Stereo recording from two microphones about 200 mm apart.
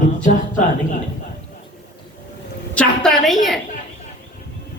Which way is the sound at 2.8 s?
Centre (ahead or behind).